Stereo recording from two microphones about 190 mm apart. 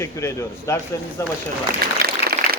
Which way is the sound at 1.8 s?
55° right (ahead or behind).